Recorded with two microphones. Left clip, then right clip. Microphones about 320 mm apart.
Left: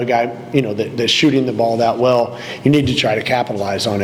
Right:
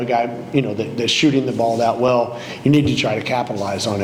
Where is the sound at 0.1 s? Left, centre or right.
Left.